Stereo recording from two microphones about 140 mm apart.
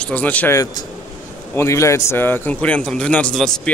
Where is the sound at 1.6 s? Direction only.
20° left (ahead or behind).